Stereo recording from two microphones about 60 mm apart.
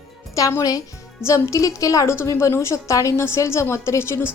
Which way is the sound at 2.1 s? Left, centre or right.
Left.